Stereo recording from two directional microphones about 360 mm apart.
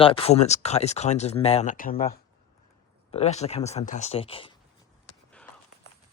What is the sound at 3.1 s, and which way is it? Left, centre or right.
Speech, centre.